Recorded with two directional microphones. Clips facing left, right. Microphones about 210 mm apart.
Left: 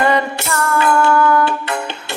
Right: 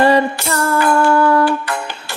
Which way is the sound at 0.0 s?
30° right (ahead or behind).